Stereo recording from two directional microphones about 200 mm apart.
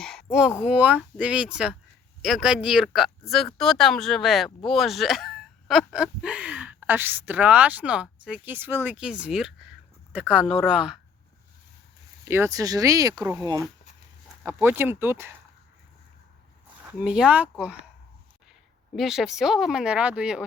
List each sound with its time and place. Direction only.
0.0 s a sound: 5° left (ahead or behind)
0.6 s speech: 5° right (ahead or behind)
12.2 s speech: 10° right (ahead or behind)
16.8 s speech: 5° right (ahead or behind)
18.9 s speech: centre (ahead or behind)